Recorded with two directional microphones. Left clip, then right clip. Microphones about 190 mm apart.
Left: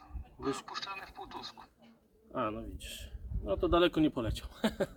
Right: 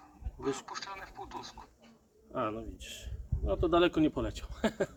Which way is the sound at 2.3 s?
15° left (ahead or behind).